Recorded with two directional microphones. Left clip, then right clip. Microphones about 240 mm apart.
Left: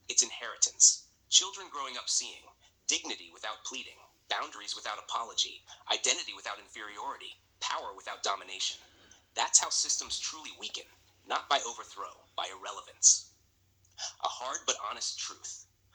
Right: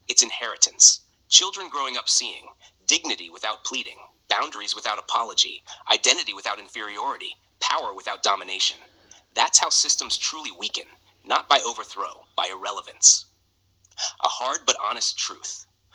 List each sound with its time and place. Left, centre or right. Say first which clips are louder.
0.0 s speech: right 10 dB; right